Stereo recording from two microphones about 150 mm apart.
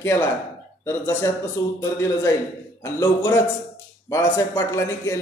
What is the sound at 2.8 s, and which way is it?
Speech, 15° left (ahead or behind).